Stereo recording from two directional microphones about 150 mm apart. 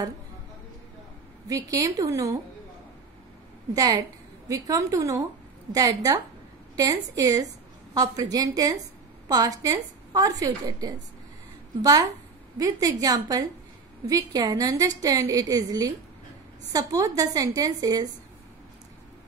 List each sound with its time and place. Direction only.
1.5 s a woman's voice: 25° right (ahead or behind)
3.7 s a woman's voice: 25° right (ahead or behind)